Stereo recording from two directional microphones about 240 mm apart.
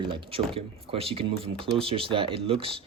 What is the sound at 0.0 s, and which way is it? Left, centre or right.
A man's voice, right.